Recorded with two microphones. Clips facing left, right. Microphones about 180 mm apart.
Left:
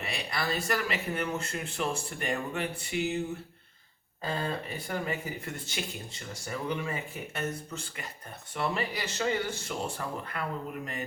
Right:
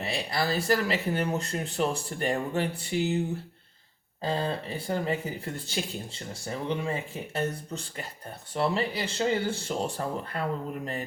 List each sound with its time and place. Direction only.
0.0 s speech: 30° right (ahead or behind)
4.2 s speech: 30° right (ahead or behind)